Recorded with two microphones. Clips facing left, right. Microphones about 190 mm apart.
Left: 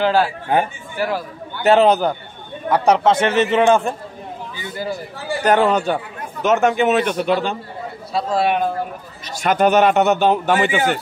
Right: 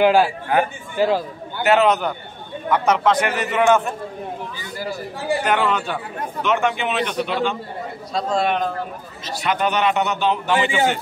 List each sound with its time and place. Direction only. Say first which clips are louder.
0.0 s a man's voice: right 2 dB; 15° right (ahead or behind)
1.6 s a man's voice: left 3 dB; 30° left (ahead or behind)
5.4 s a man's voice: left 8 dB; 40° left (ahead or behind)
8.1 s a man's voice: left 2 dB; 5° left (ahead or behind)
9.4 s a man's voice: left 6 dB; 45° left (ahead or behind)